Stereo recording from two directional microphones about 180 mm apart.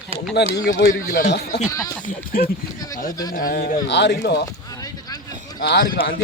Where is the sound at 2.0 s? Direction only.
55° left (ahead or behind).